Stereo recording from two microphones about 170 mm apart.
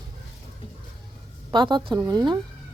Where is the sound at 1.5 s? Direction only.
25° right (ahead or behind).